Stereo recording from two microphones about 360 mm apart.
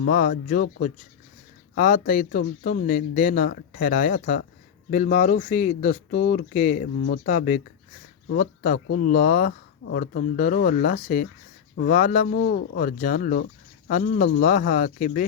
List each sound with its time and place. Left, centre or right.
0.0 s speech: left